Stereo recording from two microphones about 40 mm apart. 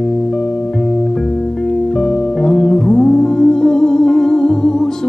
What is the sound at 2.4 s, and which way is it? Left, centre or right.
Music, centre.